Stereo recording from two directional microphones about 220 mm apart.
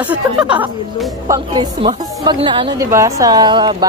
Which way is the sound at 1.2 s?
20° right (ahead or behind).